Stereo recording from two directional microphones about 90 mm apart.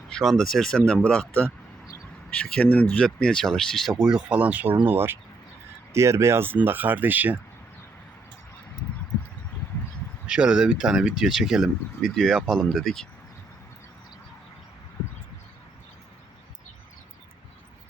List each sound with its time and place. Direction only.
0.1 s speech: 5° left (ahead or behind)
4.0 s speech: 10° right (ahead or behind)
10.2 s speech: 10° right (ahead or behind)